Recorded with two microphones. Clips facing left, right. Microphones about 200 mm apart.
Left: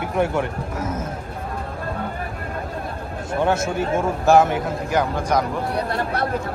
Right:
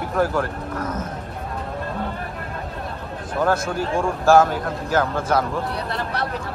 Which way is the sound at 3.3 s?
25° left (ahead or behind).